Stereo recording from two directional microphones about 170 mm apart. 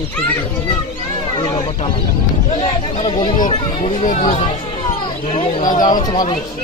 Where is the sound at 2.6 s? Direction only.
35° left (ahead or behind).